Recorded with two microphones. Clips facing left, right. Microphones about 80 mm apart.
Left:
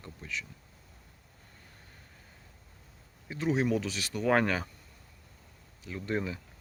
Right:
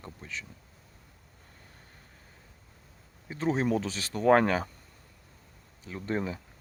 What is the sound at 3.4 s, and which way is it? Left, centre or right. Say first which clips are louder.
Speech: right 1 dB; right.